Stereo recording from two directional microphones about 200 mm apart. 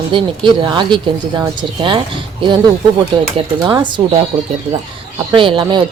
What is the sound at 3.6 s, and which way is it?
Speech, 25° right (ahead or behind).